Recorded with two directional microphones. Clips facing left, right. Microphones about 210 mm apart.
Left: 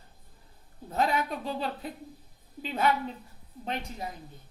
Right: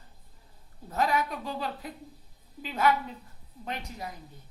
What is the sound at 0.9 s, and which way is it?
A woman's voice, 25° left (ahead or behind).